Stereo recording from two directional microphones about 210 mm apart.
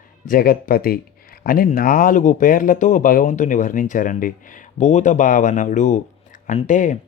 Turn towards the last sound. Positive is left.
turn(degrees=35)  # may be behind; listen again after turning